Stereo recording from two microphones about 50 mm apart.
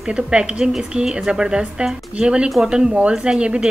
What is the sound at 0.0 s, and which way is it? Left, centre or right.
A woman's voice, centre.